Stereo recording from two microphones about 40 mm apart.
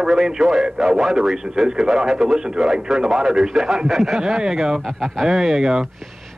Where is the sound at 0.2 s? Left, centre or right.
Centre.